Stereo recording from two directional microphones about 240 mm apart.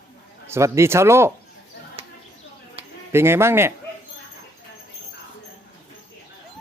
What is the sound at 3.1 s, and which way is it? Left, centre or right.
Speech, centre.